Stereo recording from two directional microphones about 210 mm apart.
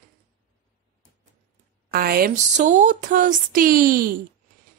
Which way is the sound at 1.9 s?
45° right (ahead or behind).